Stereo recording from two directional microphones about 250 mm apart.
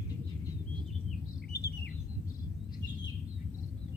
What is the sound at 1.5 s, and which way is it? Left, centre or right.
Bird, left.